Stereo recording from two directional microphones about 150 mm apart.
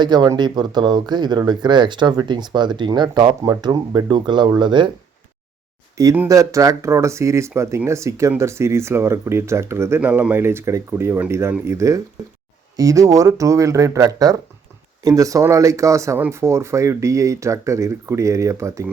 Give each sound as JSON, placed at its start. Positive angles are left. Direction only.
{"t": 0.0, "sound": "speech", "side_deg": -30}
{"t": 6.2, "sound": "speech", "side_deg": -20}